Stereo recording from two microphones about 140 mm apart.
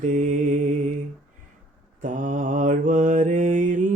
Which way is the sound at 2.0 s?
65° right (ahead or behind).